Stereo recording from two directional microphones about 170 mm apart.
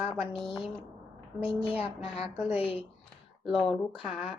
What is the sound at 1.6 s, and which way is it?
Speech, 35° left (ahead or behind).